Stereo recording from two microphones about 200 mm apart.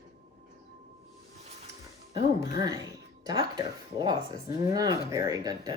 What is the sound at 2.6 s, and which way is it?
Speech, 20° right (ahead or behind).